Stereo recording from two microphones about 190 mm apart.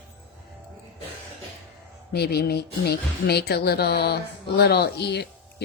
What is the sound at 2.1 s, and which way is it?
A woman's voice, 55° left (ahead or behind).